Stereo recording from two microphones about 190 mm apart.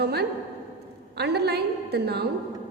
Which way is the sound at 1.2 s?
60° right (ahead or behind).